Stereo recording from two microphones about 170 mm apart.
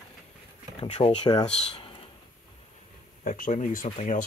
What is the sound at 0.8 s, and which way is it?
Speech, 30° left (ahead or behind).